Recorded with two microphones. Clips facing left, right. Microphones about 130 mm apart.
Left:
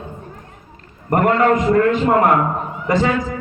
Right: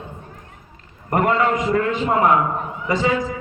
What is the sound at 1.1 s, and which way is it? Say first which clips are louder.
A man's voice: left 4 dB; 55° left (ahead or behind).